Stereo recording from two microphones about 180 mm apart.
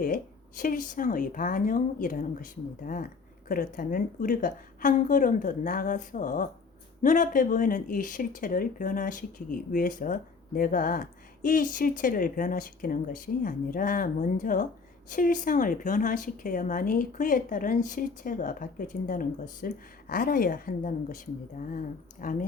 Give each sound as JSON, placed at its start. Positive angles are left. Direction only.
{"t": 0.0, "sound": "speech", "side_deg": 45}